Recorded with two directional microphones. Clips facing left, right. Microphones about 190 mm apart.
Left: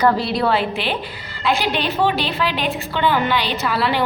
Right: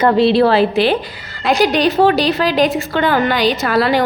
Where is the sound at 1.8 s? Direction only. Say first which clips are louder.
Right 6 dB; 85° right.